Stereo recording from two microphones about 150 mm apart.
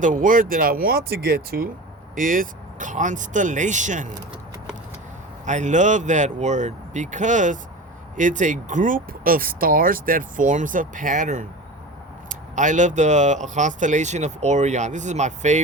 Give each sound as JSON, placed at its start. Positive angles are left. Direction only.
{"t": 0.0, "sound": "speech", "side_deg": -60}
{"t": 2.1, "sound": "speech", "side_deg": -65}
{"t": 5.5, "sound": "speech", "side_deg": -55}